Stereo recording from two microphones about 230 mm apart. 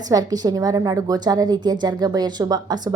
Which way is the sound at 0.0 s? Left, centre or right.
Centre.